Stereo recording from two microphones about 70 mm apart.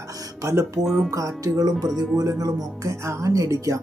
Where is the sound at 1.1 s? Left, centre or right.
Right.